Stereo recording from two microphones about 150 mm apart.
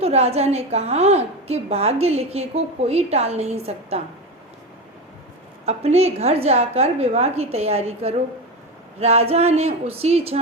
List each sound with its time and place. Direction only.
0.0 s a woman's voice: 45° right (ahead or behind)
5.6 s a woman's voice: 45° right (ahead or behind)